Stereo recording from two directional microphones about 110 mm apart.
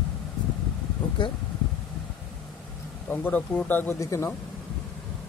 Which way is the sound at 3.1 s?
15° left (ahead or behind).